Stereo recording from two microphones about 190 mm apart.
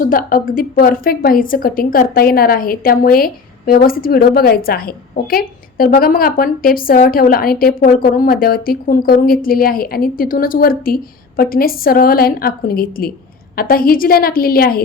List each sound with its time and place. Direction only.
0.0 s a woman's voice: 50° left (ahead or behind)